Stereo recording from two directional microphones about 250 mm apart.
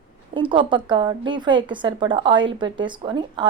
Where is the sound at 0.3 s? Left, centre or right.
Centre.